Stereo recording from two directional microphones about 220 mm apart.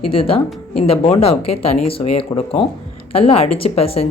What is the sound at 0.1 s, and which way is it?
Speech, 25° left (ahead or behind).